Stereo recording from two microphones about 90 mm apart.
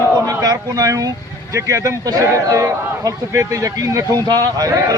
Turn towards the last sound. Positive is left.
turn(degrees=-40)  # may be behind; listen again after turning